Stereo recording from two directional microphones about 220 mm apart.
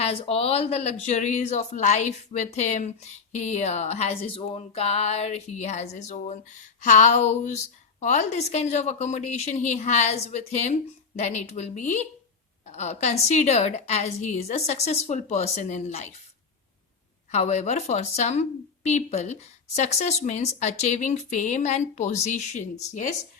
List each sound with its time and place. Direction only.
0.0 s a woman's voice: 25° left (ahead or behind)
17.3 s a woman's voice: 30° left (ahead or behind)